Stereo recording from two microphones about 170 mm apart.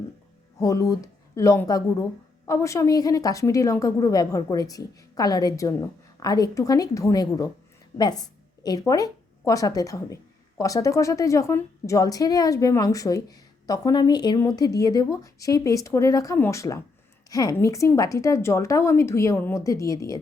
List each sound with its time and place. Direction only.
0.6 s a woman's voice: 20° left (ahead or behind)
8.2 s a sound: 25° left (ahead or behind)
8.9 s a woman's voice: 20° left (ahead or behind)